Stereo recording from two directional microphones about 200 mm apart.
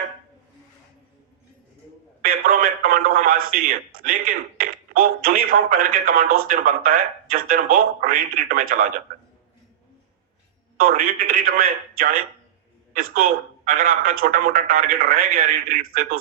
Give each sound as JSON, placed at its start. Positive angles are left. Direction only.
{"t": 2.2, "sound": "a sound", "side_deg": -45}
{"t": 4.0, "sound": "speech", "side_deg": -45}
{"t": 6.2, "sound": "speech", "side_deg": -90}
{"t": 6.5, "sound": "speech", "side_deg": -45}
{"t": 10.8, "sound": "speech", "side_deg": -45}